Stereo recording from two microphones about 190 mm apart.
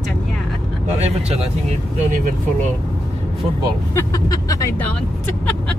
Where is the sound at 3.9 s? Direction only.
15° left (ahead or behind).